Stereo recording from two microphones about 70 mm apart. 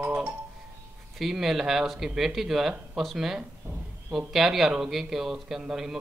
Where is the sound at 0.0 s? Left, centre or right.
Centre.